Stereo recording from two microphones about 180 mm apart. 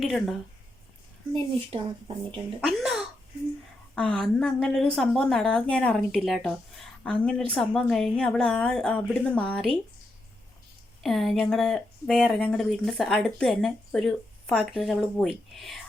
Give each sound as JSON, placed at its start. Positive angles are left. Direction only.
{"t": 0.0, "sound": "speech", "side_deg": 0}
{"t": 1.3, "sound": "speech", "side_deg": -30}
{"t": 2.6, "sound": "a child's voice", "side_deg": 0}
{"t": 11.0, "sound": "speech", "side_deg": 0}